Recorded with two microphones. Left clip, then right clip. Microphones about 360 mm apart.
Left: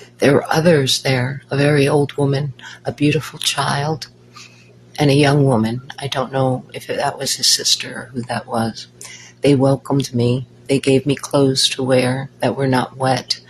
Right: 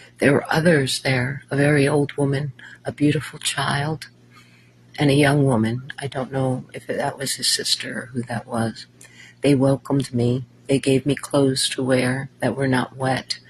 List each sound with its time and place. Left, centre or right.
0.2 s speech: right